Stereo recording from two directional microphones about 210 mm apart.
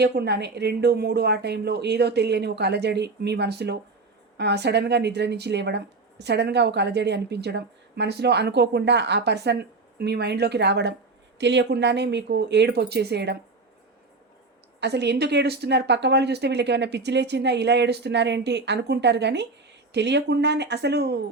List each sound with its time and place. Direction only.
0.0 s speech: 50° right (ahead or behind)
14.8 s speech: 55° right (ahead or behind)